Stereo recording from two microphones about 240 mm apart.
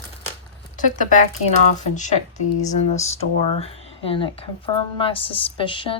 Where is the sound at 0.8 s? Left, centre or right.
Left.